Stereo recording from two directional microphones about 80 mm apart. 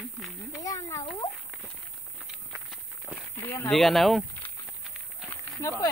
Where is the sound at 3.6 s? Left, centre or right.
Centre.